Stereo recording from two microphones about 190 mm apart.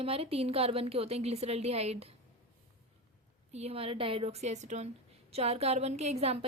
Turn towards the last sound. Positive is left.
turn(degrees=-35)  # may be behind; listen again after turning